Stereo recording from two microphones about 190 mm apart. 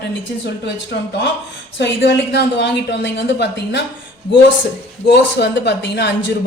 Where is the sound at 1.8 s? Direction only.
60° left (ahead or behind).